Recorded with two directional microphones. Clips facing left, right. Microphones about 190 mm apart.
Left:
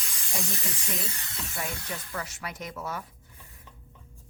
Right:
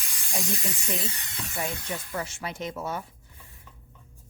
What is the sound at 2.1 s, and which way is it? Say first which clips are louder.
Speech: right 3 dB; 25° right (ahead or behind).